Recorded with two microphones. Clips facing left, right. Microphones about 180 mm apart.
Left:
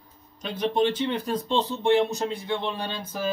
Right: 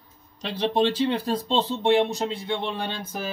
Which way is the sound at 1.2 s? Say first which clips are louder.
Right 1 dB; 30° right (ahead or behind).